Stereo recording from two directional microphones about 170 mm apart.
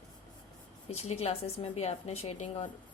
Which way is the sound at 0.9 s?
40° left (ahead or behind).